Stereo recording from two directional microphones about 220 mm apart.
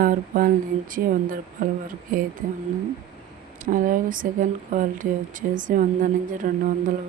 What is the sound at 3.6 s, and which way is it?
Speech, 35° right (ahead or behind).